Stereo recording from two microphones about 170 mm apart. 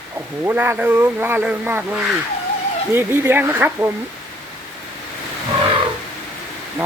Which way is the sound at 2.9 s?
15° right (ahead or behind).